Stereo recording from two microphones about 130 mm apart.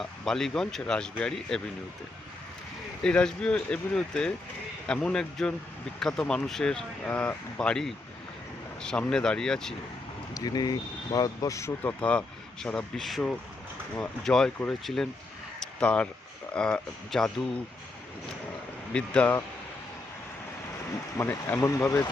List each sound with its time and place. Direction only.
0.0 s speech: 5° left (ahead or behind)
3.0 s speech: 5° left (ahead or behind)
10.3 s speech: 30° left (ahead or behind)
11.8 s speech: 10° left (ahead or behind)
15.6 s a sound: 10° left (ahead or behind)
16.6 s speech: 5° left (ahead or behind)
18.9 s speech: 10° left (ahead or behind)
21.2 s speech: 15° left (ahead or behind)